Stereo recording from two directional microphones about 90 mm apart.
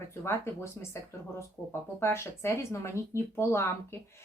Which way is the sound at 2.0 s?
25° left (ahead or behind).